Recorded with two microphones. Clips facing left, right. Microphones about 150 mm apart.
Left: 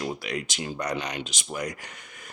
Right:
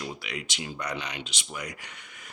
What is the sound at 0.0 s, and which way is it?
Speech, 45° left (ahead or behind).